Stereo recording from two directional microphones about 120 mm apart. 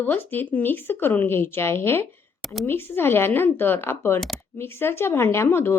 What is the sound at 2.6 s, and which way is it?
A woman's voice, 20° left (ahead or behind).